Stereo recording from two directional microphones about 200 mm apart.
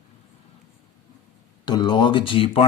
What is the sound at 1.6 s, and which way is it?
Speech, 20° left (ahead or behind).